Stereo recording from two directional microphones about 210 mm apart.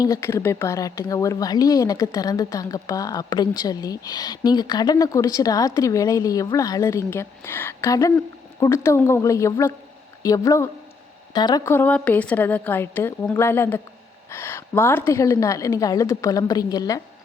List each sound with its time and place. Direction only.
0.0 s speech: 15° left (ahead or behind)